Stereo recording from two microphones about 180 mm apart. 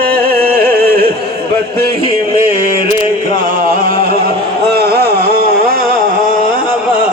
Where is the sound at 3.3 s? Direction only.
50° right (ahead or behind).